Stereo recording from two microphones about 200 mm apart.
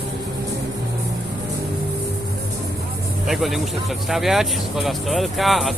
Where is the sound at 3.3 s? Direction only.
Centre (ahead or behind).